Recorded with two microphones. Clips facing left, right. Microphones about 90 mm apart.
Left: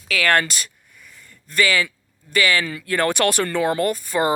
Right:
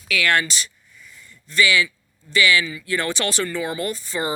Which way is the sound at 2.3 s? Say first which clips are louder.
Even; 45° left (ahead or behind).